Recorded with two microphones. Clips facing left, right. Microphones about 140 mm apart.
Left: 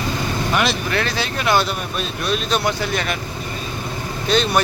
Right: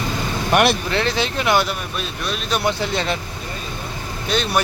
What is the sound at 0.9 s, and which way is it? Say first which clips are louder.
Speech: right 2 dB; 20° right (ahead or behind).